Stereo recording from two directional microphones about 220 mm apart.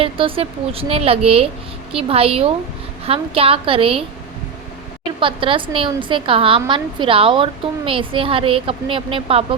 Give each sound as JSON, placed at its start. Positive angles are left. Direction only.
{"t": 0.0, "sound": "a woman's voice", "side_deg": -25}
{"t": 5.2, "sound": "a woman's voice", "side_deg": -25}